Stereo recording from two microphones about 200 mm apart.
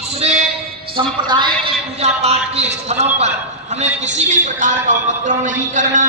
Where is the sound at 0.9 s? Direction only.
20° right (ahead or behind).